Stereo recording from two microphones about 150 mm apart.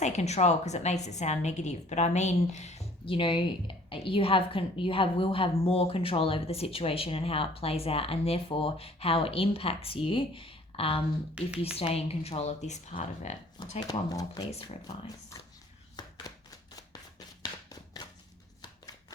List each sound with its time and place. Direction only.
0.0 s a woman's voice: 50° left (ahead or behind)
3.2 s a woman's voice: 35° left (ahead or behind)
11.4 s a woman's voice: 5° right (ahead or behind)
11.9 s a woman's voice: 45° left (ahead or behind)
13.8 s speech: 30° left (ahead or behind)
16.9 s a sound: 25° left (ahead or behind)